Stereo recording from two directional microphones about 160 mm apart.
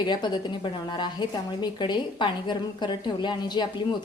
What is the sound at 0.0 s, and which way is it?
A woman's voice, 25° left (ahead or behind).